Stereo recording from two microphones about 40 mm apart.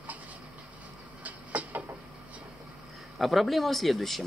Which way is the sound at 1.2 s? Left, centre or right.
Right.